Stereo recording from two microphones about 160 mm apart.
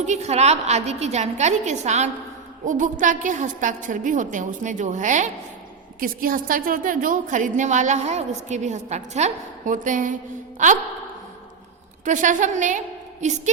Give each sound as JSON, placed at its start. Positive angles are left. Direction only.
{"t": 0.0, "sound": "a woman's voice", "side_deg": -45}
{"t": 6.0, "sound": "a woman's voice", "side_deg": -60}
{"t": 12.0, "sound": "a woman's voice", "side_deg": -50}